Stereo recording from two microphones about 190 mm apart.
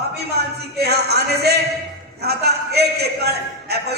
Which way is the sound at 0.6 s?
60° right (ahead or behind).